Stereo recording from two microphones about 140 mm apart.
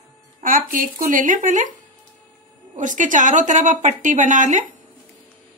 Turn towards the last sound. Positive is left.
turn(degrees=-65)  # may be behind; listen again after turning